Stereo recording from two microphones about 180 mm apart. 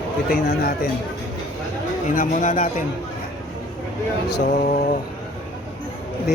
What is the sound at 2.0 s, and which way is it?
Speech, 45° left (ahead or behind).